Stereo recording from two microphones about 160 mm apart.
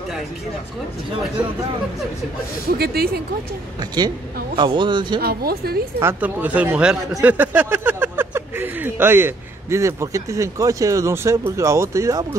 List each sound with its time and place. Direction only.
2.8 s speech: 75° right (ahead or behind)
4.6 s speech: 30° right (ahead or behind)
5.2 s speech: 70° right (ahead or behind)
5.9 s speech: 15° right (ahead or behind)